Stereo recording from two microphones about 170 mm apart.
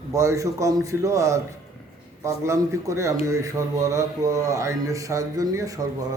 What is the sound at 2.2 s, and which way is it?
Speech, 15° right (ahead or behind).